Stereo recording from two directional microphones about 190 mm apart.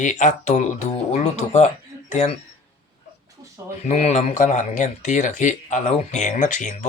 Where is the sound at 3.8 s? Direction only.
35° left (ahead or behind).